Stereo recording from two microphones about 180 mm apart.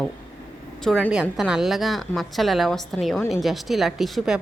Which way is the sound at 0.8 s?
Centre (ahead or behind).